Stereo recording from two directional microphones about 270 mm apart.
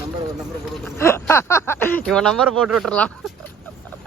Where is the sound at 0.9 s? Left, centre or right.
Centre.